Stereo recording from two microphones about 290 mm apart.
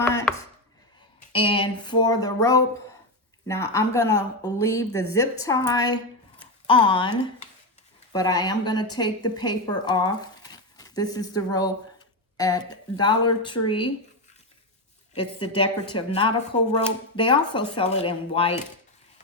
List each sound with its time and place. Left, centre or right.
0.1 s chopping: centre
1.3 s a woman's voice: centre
8.1 s a woman's voice: centre
15.1 s a woman's voice: centre